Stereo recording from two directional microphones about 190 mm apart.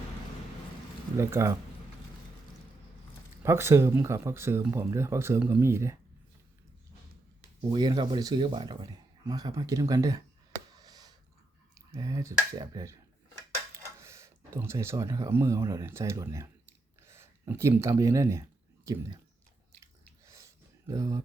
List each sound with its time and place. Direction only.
1.1 s speech: 15° right (ahead or behind)
3.4 s speech: 15° right (ahead or behind)
7.7 s speech: 20° right (ahead or behind)
10.8 s a sound: 20° right (ahead or behind)
11.9 s speech: 15° right (ahead or behind)
19.8 s drip: 15° right (ahead or behind)